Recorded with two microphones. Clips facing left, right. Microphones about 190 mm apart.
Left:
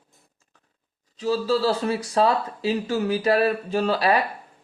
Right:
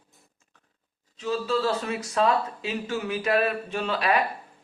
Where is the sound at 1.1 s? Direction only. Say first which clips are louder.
Left 4 dB; 35° left (ahead or behind).